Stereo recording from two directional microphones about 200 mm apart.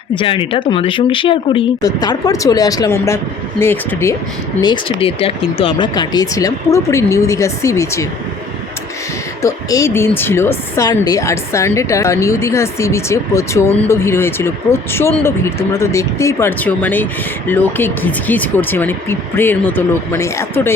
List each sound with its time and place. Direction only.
0.2 s a woman's voice: 25° left (ahead or behind)
4.6 s speech: 25° left (ahead or behind)
9.4 s a woman's voice: 15° left (ahead or behind)